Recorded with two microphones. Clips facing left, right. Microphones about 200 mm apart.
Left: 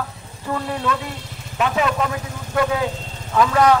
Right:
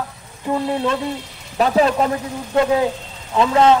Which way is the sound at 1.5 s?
35° right (ahead or behind).